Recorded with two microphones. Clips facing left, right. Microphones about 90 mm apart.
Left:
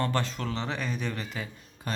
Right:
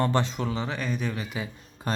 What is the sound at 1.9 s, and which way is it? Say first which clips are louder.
Speech: right 4 dB; 35° right (ahead or behind).